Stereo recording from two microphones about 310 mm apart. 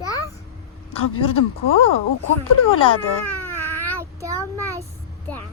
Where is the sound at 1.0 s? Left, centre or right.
Left.